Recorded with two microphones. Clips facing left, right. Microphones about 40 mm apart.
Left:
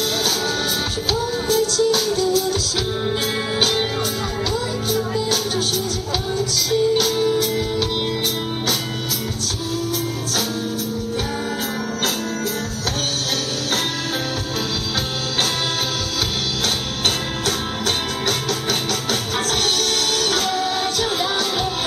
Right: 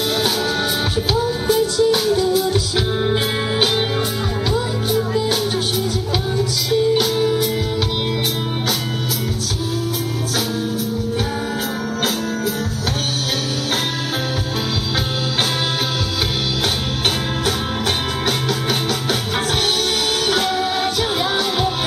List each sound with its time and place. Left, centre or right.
1.1 s music: centre
20.2 s music: centre